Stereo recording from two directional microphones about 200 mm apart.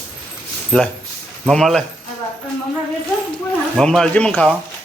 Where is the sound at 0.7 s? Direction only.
5° left (ahead or behind).